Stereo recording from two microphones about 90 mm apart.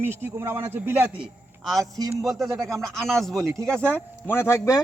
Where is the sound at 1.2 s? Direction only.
Centre (ahead or behind).